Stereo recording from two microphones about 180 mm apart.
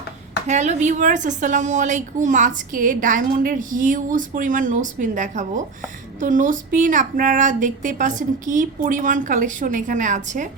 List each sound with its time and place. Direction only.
0.4 s a woman's voice: 40° right (ahead or behind)